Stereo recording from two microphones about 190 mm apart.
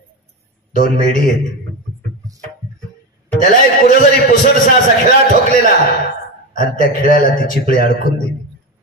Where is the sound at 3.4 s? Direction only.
45° left (ahead or behind).